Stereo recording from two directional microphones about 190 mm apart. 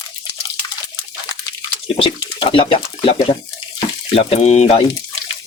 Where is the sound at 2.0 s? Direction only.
30° left (ahead or behind).